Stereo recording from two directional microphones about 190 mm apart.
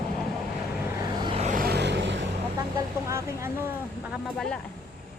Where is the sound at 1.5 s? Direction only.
50° right (ahead or behind); by 2.2 s 65° right (ahead or behind).